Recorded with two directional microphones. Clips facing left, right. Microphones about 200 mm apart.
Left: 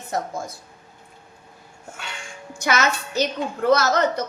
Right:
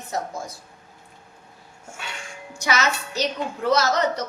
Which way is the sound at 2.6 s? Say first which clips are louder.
Left 2 dB; 55° left (ahead or behind).